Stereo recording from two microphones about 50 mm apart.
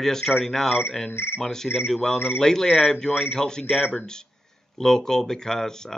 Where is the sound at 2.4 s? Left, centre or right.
Centre.